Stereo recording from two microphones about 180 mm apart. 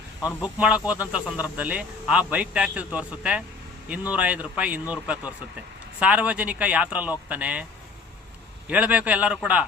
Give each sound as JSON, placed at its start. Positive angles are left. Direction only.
{"t": 0.2, "sound": "speech", "side_deg": 15}
{"t": 0.4, "sound": "speech", "side_deg": -5}
{"t": 8.7, "sound": "speech", "side_deg": -10}